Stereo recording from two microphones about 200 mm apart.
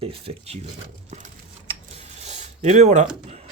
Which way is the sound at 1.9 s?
35° right (ahead or behind).